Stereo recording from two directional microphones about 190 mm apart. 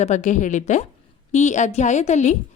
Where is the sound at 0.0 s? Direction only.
40° left (ahead or behind).